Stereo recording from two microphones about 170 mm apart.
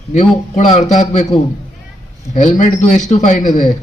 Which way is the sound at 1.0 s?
40° left (ahead or behind).